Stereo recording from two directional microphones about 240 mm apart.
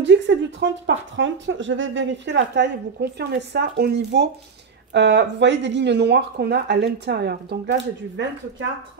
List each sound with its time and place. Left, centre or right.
0.0 s speech: right